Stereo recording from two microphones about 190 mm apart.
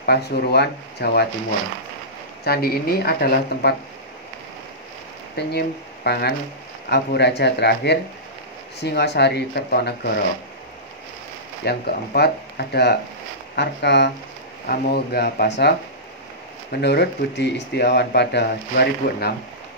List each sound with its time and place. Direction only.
0.0 s speech: 60° left (ahead or behind)
2.4 s speech: 55° left (ahead or behind)
5.3 s speech: 60° left (ahead or behind)
11.6 s speech: 55° left (ahead or behind)
16.8 s speech: 60° left (ahead or behind)